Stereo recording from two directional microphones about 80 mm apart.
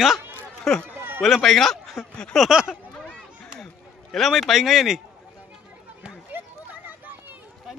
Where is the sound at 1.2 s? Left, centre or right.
Centre.